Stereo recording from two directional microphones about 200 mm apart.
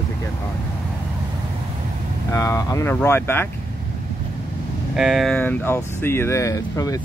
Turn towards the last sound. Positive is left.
turn(degrees=15)  # may be behind; listen again after turning